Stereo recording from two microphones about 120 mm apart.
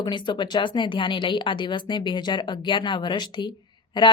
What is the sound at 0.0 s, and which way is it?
A woman's voice, 40° left (ahead or behind).